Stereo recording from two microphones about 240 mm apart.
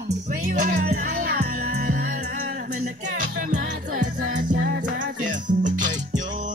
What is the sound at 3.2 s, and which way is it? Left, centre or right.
Music, right.